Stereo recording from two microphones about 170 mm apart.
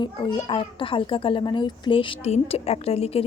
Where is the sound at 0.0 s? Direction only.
30° left (ahead or behind).